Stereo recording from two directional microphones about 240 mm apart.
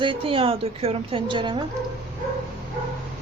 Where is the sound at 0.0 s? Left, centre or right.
Right.